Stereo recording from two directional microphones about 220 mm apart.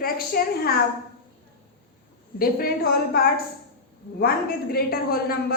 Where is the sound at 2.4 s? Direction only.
45° left (ahead or behind).